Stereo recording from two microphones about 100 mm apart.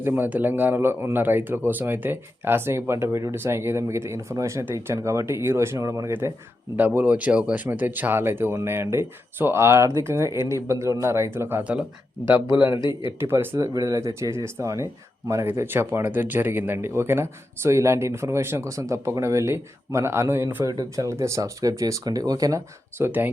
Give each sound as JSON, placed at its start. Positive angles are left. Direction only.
{"t": 0.0, "sound": "a man's voice", "side_deg": -20}
{"t": 6.7, "sound": "a man's voice", "side_deg": -15}
{"t": 13.6, "sound": "a man's voice", "side_deg": -35}
{"t": 20.7, "sound": "speech", "side_deg": -35}
{"t": 23.0, "sound": "a man's voice", "side_deg": -20}